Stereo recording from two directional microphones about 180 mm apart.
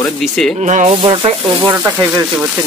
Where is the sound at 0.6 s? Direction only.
40° right (ahead or behind).